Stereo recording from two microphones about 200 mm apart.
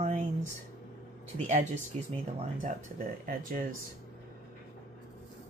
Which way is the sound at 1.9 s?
30° right (ahead or behind).